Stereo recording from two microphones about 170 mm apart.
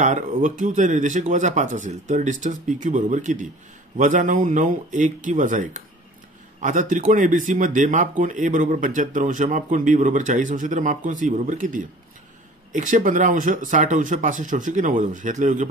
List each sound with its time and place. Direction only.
0.0 s speech: 45° right (ahead or behind)